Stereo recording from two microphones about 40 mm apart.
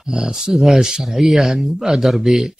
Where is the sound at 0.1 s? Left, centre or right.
Centre.